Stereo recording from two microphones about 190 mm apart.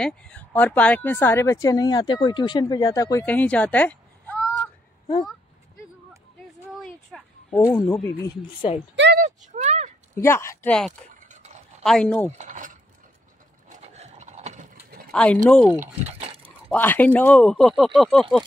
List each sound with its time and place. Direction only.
0.0 s speech: 5° left (ahead or behind)
6.7 s a sound: centre (ahead or behind)
8.9 s speech: 65° right (ahead or behind)
9.6 s a sound: 35° right (ahead or behind)
10.2 s speech: 15° left (ahead or behind)
10.9 s a sound: 40° right (ahead or behind)
11.8 s speech: 5° left (ahead or behind)
12.4 s speech: 40° right (ahead or behind)
13.7 s horse: 35° right (ahead or behind)
15.0 s speech: 5° left (ahead or behind)
15.8 s speech: 30° right (ahead or behind)
16.7 s speech: 10° left (ahead or behind)